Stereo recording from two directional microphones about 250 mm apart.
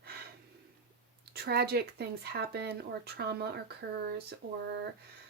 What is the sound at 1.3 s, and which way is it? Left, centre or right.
Speech, right.